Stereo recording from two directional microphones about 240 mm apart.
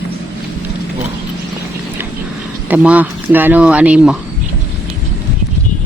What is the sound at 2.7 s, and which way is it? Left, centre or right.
Speech, centre.